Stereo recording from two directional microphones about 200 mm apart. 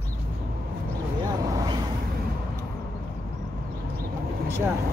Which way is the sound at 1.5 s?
15° right (ahead or behind).